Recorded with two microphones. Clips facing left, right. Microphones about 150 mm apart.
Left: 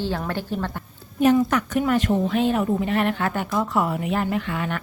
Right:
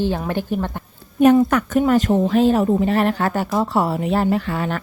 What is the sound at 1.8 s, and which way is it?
Speech, 40° right (ahead or behind).